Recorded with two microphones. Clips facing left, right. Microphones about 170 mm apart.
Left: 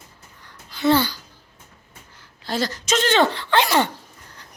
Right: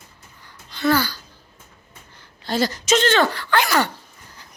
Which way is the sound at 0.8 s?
25° left (ahead or behind).